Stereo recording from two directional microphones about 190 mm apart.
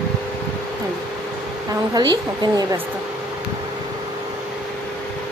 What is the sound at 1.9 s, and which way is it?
Speech, 20° right (ahead or behind).